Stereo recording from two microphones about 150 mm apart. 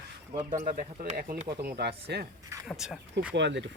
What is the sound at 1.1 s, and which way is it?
Speech, 90° right.